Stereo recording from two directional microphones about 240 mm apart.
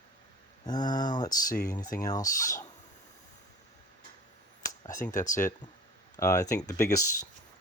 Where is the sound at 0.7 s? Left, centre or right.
Centre.